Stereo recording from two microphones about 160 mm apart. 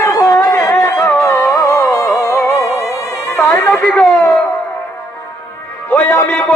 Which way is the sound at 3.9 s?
5° left (ahead or behind).